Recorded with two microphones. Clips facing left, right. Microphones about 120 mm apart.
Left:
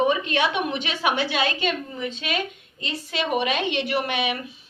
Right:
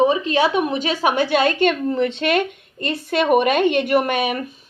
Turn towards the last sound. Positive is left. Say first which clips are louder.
# right 6 dB
turn(degrees=-45)  # may be behind; listen again after turning